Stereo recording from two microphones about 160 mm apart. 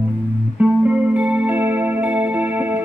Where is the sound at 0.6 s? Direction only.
10° right (ahead or behind).